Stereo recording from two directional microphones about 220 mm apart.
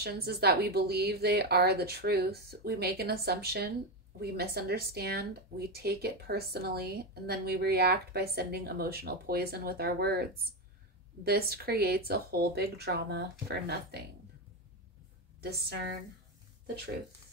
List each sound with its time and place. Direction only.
0.0 s speech: 45° right (ahead or behind)
15.4 s speech: 45° right (ahead or behind)